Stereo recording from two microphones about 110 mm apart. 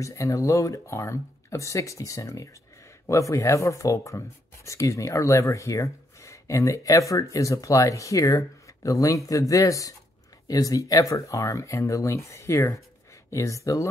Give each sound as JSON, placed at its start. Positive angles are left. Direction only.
{"t": 0.0, "sound": "speech", "side_deg": 30}